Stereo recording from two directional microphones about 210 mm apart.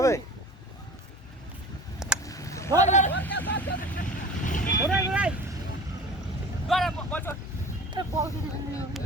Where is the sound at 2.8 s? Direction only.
35° left (ahead or behind).